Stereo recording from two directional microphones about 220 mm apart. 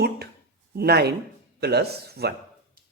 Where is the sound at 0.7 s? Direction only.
45° right (ahead or behind).